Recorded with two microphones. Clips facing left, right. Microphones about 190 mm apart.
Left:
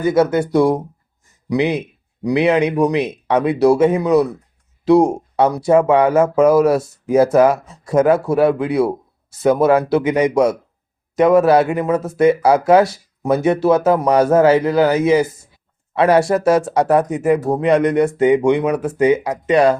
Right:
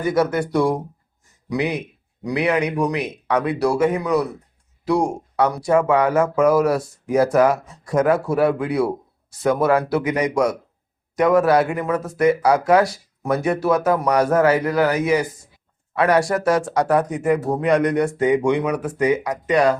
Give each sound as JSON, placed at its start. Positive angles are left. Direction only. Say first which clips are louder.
{"t": 0.0, "sound": "speech", "louder": "left 4 dB", "side_deg": 25}